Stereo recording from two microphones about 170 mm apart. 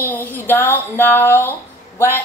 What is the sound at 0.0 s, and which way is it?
A woman's voice, 10° left (ahead or behind).